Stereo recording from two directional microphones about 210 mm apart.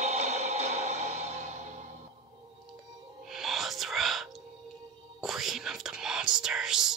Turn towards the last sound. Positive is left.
turn(degrees=-5)  # may be behind; listen again after turning